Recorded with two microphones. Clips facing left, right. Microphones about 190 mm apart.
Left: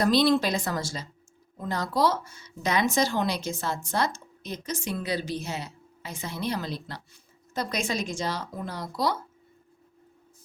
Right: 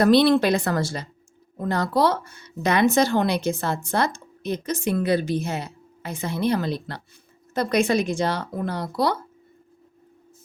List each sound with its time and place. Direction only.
0.0 s speech: 60° right (ahead or behind)